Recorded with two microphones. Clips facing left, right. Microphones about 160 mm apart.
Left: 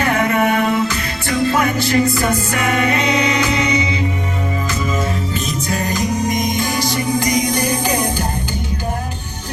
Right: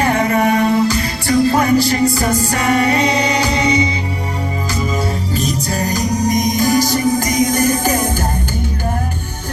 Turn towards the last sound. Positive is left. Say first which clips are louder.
# right 4 dB
turn(degrees=-50)  # may be behind; listen again after turning